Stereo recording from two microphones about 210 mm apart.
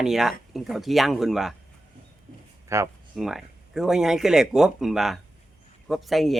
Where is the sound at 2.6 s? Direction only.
15° right (ahead or behind).